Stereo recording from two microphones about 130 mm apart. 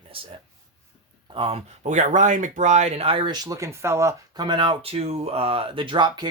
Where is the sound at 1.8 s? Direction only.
70° right (ahead or behind); by 4.4 s 20° right (ahead or behind).